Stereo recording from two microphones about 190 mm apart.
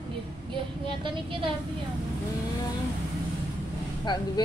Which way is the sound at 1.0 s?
25° right (ahead or behind).